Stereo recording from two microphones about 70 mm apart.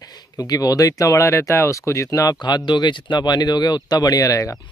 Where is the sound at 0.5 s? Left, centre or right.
Left.